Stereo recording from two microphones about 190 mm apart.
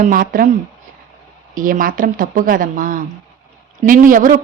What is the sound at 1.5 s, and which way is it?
Speech, 45° right (ahead or behind).